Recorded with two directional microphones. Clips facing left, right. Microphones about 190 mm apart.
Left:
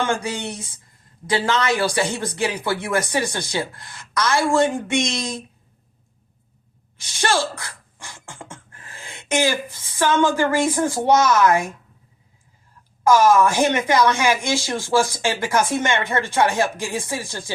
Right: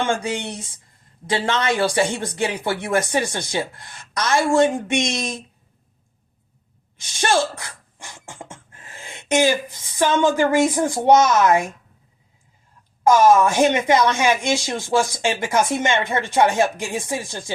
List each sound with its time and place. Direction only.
0.2 s speech: 25° right (ahead or behind)
7.2 s speech: 20° right (ahead or behind)
13.1 s speech: 20° right (ahead or behind)